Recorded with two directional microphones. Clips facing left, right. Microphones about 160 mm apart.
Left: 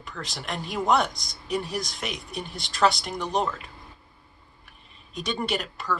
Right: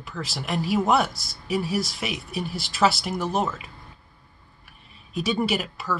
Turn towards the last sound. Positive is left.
turn(degrees=-5)  # may be behind; listen again after turning